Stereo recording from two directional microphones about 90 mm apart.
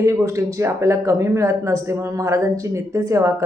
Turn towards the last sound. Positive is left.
turn(degrees=-35)  # may be behind; listen again after turning